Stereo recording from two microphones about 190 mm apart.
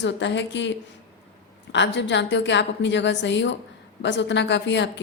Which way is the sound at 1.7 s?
70° left (ahead or behind).